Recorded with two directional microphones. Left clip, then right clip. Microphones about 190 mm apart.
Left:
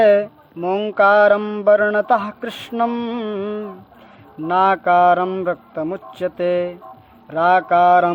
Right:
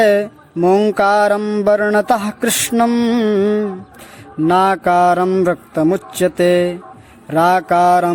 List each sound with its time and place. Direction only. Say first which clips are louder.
0.0 s mantra: even; 30° right (ahead or behind)
4.4 s a man's voice: right 2 dB; 30° right (ahead or behind)